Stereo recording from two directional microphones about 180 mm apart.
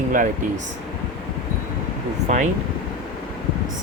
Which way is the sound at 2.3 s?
40° right (ahead or behind).